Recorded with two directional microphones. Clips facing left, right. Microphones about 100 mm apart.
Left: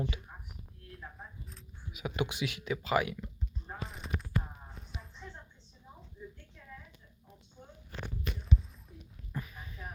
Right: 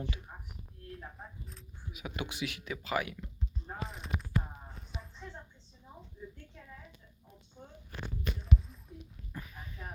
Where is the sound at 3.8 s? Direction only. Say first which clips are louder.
Right 2 dB; centre (ahead or behind).